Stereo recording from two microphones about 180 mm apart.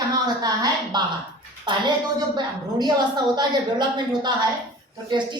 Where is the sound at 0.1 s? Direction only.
20° right (ahead or behind).